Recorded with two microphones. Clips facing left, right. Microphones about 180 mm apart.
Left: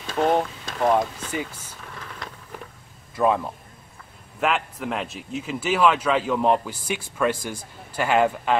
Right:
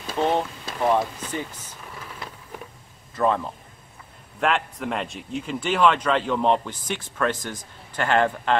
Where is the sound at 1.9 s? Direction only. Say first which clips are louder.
Even; 5° right (ahead or behind).